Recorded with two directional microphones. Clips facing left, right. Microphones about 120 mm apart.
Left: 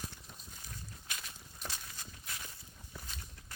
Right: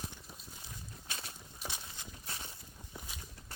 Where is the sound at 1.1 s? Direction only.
30° right (ahead or behind).